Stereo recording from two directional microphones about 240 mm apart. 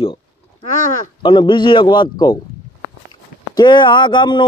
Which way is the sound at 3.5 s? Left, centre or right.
Centre.